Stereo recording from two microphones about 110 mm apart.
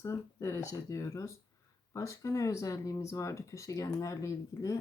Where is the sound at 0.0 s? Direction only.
25° left (ahead or behind).